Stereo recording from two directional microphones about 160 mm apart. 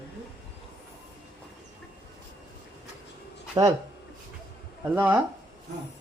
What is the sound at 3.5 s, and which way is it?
Speech, 20° right (ahead or behind).